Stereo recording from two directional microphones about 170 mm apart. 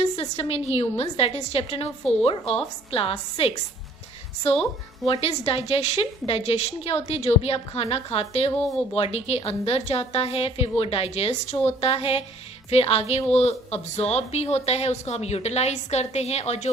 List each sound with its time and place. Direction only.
0.0 s a woman's voice: 40° left (ahead or behind)
5.0 s a woman's voice: 35° left (ahead or behind)